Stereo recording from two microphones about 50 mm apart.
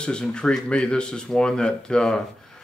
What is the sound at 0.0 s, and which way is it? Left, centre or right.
Speech, centre.